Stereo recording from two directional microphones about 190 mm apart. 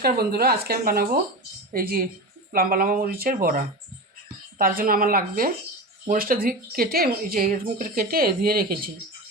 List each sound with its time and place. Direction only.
0.0 s speech: 55° right (ahead or behind)
4.8 s speech: 50° right (ahead or behind)